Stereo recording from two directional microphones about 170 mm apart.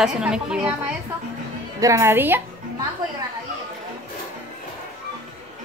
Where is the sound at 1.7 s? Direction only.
20° right (ahead or behind).